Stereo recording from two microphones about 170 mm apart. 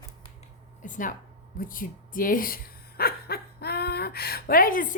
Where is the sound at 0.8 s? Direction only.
50° left (ahead or behind).